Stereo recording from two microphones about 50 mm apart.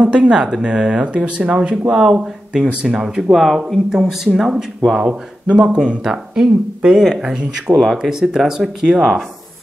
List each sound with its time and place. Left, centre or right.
0.0 s speech: right
5.0 s speech: centre